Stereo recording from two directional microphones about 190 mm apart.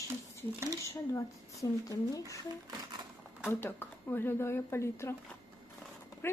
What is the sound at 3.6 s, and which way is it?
A woman's voice, 10° left (ahead or behind).